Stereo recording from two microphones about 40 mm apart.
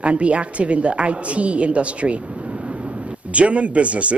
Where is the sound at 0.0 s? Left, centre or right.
Right.